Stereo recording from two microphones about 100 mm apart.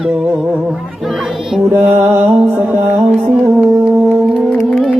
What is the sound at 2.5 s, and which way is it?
Music, 15° right (ahead or behind).